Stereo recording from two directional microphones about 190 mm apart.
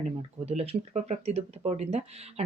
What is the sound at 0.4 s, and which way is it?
Speech, 35° right (ahead or behind).